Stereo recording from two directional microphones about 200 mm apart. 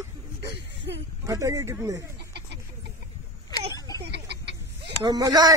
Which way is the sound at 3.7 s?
20° left (ahead or behind).